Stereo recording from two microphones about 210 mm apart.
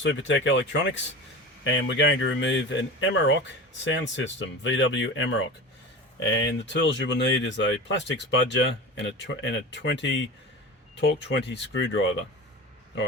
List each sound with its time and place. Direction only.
0.0 s speech: 60° left (ahead or behind)
6.8 s speech: 60° left (ahead or behind)